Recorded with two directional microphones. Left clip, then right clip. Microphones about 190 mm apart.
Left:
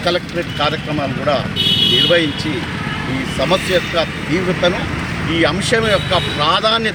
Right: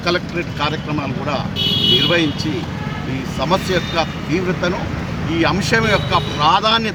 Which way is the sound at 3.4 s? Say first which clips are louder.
Left 2 dB; centre (ahead or behind).